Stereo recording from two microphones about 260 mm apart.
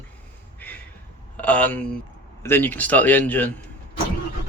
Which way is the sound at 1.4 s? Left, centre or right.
Centre.